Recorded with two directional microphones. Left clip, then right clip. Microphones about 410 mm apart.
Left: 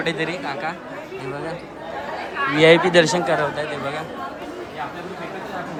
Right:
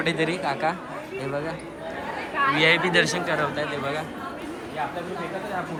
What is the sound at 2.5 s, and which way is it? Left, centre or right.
Speech, centre.